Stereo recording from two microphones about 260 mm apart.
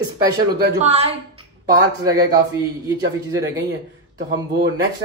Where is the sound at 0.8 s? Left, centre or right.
Right.